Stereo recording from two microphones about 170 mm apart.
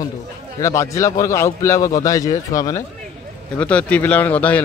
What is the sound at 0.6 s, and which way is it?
A man's voice, 15° left (ahead or behind).